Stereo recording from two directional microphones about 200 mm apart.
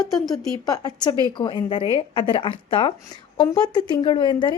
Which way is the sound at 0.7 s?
20° left (ahead or behind).